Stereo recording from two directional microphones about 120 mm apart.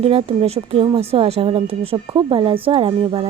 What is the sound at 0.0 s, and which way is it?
Speech, 55° right (ahead or behind).